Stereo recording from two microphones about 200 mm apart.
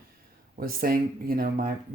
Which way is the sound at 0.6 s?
45° right (ahead or behind).